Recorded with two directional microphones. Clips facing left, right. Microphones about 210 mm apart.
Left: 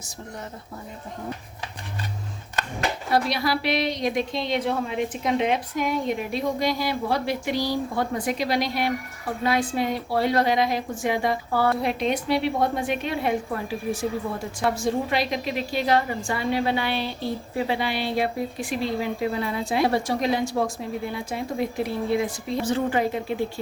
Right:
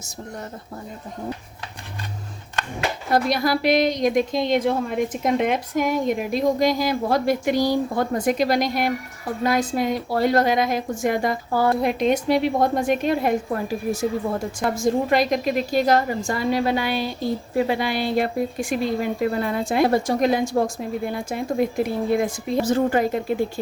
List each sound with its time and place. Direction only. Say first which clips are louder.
3.1 s a woman's voice: right 4 dB; 45° right (ahead or behind)